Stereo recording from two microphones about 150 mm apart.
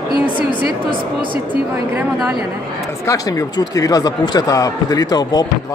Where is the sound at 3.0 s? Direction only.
25° left (ahead or behind).